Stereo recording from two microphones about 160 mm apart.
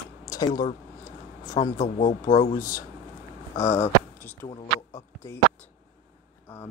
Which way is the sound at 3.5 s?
20° left (ahead or behind).